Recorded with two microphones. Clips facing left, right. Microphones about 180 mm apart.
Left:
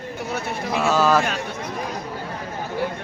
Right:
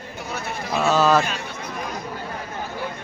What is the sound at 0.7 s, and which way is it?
Speech, 10° left (ahead or behind).